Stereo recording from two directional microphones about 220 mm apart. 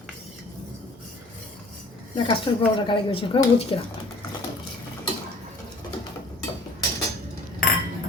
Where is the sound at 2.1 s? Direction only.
20° left (ahead or behind).